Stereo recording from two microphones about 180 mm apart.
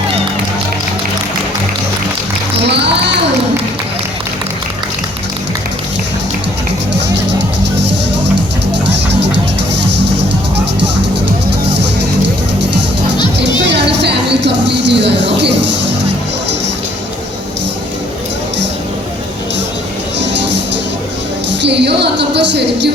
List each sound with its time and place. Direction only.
2.6 s a child's voice: 70° right (ahead or behind)
13.7 s a sound: 75° right (ahead or behind)
20.1 s music: 75° right (ahead or behind)